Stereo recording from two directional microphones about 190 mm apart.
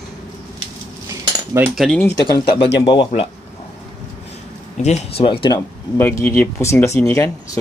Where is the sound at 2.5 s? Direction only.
60° left (ahead or behind).